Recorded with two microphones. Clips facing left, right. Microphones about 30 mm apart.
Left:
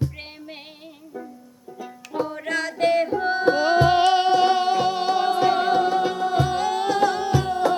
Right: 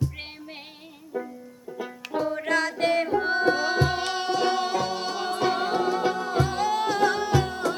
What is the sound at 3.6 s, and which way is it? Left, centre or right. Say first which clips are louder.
Music: left 8 dB; left.